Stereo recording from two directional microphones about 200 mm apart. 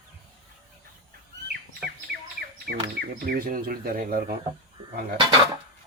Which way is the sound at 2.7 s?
50° right (ahead or behind).